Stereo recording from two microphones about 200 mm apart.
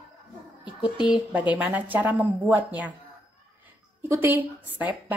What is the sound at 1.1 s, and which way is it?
A woman's voice, 5° right (ahead or behind).